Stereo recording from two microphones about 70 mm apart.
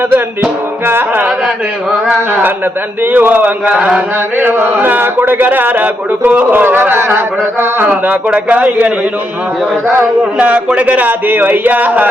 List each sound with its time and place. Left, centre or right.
3.1 s a man's voice: right
4.4 s a man's voice: right
10.3 s a man's voice: centre